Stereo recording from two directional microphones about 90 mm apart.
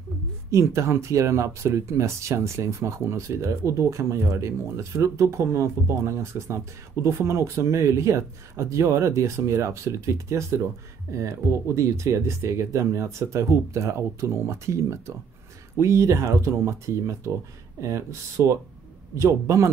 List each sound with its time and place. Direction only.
0.5 s speech: 35° right (ahead or behind)